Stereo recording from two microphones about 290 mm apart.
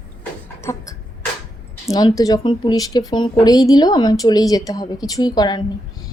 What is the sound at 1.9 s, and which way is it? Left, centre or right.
Speech, centre.